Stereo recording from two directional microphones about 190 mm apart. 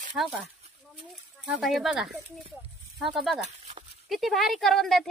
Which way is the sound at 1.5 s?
Centre (ahead or behind).